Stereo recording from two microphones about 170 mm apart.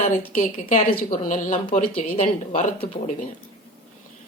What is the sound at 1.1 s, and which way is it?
Speech, 50° left (ahead or behind).